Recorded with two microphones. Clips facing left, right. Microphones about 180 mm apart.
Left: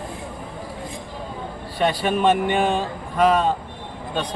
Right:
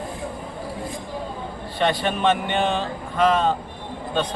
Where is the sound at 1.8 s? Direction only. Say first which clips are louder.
Left 2 dB; 10° left (ahead or behind).